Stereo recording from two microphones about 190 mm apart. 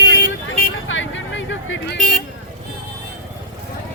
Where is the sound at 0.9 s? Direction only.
85° left.